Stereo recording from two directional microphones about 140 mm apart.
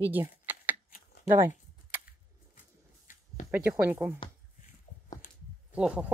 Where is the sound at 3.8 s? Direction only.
15° right (ahead or behind).